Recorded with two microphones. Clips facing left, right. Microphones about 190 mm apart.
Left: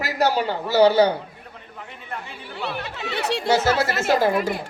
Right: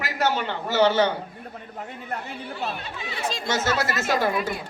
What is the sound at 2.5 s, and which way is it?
Speech, 75° left (ahead or behind).